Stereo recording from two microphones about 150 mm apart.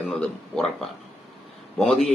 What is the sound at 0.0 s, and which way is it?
Speech, 5° left (ahead or behind).